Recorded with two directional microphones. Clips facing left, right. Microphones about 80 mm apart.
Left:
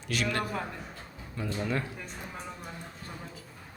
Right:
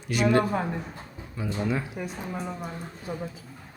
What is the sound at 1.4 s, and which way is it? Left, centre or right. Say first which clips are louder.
Speech: right 3 dB; centre.